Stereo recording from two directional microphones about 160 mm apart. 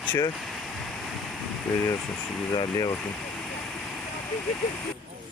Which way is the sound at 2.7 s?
20° left (ahead or behind).